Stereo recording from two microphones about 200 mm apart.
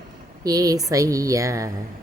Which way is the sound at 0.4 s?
20° right (ahead or behind).